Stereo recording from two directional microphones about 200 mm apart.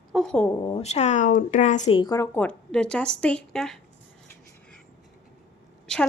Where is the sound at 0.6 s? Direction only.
30° left (ahead or behind).